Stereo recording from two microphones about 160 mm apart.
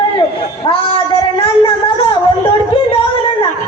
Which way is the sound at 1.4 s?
35° left (ahead or behind).